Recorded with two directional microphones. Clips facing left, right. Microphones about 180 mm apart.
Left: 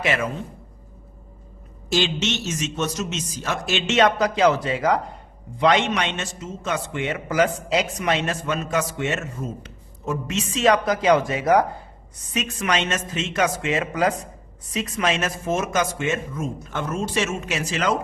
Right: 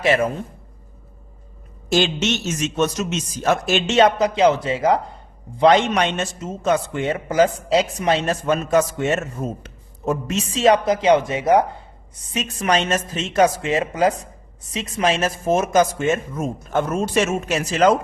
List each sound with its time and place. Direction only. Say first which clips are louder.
0.0 s a woman's voice: right 6 dB; 35° right (ahead or behind)
1.9 s a man's voice: right 4 dB; 50° right (ahead or behind)